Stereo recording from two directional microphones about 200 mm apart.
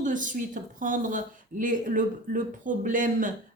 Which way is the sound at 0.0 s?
40° right (ahead or behind).